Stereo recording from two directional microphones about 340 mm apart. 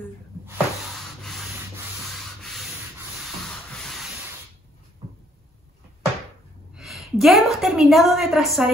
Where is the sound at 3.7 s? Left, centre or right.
Centre.